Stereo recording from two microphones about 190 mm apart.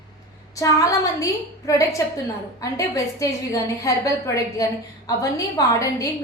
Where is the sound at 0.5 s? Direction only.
15° left (ahead or behind).